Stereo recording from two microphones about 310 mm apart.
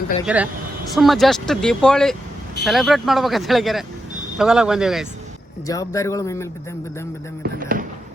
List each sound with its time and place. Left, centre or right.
0.3 s speech: centre
5.6 s speech: centre
7.4 s speech: right